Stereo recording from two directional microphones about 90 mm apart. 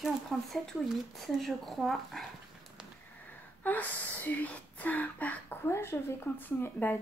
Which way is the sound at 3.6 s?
20° left (ahead or behind).